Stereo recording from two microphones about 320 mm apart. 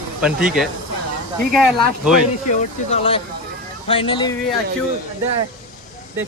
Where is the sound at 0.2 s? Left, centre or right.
Centre.